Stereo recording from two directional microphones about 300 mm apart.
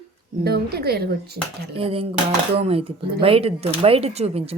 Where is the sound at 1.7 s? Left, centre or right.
Centre.